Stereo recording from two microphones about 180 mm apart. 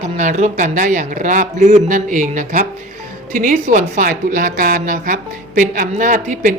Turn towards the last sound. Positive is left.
turn(degrees=-45)  # may be behind; listen again after turning